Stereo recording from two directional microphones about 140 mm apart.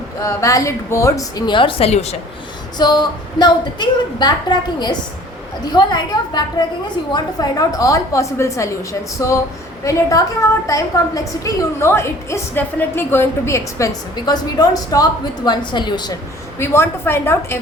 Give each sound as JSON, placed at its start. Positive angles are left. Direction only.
{"t": 0.2, "sound": "a woman's voice", "side_deg": 25}
{"t": 2.7, "sound": "a woman's voice", "side_deg": 30}
{"t": 16.6, "sound": "a woman's voice", "side_deg": 15}